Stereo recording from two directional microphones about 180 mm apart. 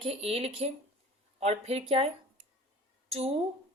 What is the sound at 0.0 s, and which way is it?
A woman's voice, 35° right (ahead or behind).